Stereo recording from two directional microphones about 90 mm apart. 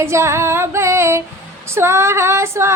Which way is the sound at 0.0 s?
30° right (ahead or behind).